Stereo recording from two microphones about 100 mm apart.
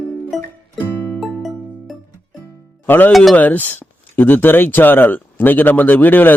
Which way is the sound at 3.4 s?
15° left (ahead or behind).